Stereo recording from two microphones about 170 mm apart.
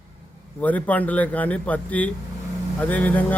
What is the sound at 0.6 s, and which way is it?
Speech, 10° left (ahead or behind).